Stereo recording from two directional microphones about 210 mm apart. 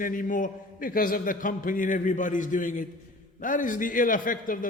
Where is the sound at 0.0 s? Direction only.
40° left (ahead or behind).